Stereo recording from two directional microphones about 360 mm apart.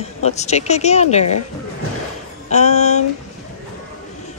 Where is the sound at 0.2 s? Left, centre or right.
Centre.